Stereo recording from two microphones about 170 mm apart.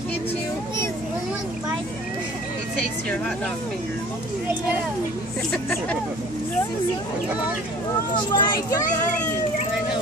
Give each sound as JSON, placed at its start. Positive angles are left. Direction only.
{"t": 8.4, "sound": "a child's voice", "side_deg": 20}